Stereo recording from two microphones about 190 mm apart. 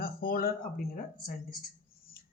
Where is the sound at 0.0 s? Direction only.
50° left (ahead or behind).